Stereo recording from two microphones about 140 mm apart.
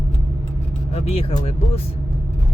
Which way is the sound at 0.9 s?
45° left (ahead or behind).